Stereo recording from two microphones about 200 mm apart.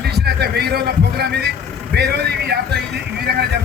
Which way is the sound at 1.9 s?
55° right (ahead or behind).